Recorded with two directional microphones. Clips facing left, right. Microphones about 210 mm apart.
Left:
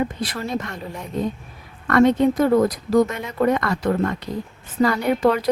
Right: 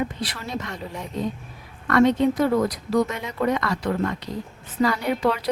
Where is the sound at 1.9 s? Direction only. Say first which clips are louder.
Left 2 dB; 50° left (ahead or behind).